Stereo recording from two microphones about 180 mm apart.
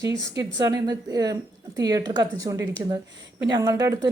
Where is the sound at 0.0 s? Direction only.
80° right.